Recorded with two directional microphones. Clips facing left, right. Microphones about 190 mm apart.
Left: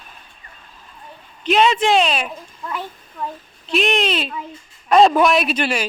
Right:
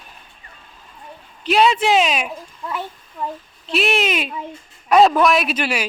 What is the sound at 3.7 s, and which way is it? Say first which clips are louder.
A man's voice: left 1 dB; 5° right (ahead or behind).